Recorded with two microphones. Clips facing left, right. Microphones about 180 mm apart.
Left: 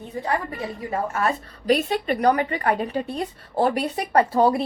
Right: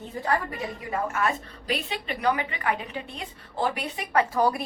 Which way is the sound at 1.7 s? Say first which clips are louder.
Left 9 dB; 45° left (ahead or behind).